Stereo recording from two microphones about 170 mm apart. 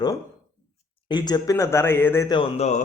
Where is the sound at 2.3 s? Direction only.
35° left (ahead or behind).